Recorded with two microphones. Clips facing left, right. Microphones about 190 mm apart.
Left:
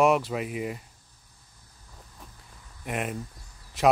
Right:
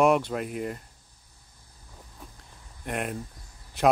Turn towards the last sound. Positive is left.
turn(degrees=0)  # may be behind; listen again after turning